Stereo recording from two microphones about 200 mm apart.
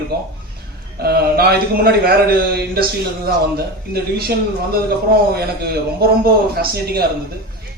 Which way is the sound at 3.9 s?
50° right (ahead or behind).